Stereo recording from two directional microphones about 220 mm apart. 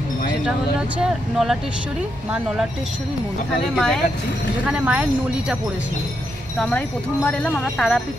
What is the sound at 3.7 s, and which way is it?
Speech, centre (ahead or behind).